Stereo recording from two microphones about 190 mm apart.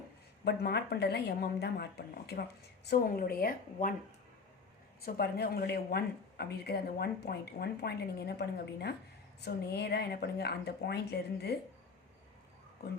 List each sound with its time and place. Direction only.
0.4 s a woman's voice: 60° left (ahead or behind)
5.0 s speech: 55° left (ahead or behind)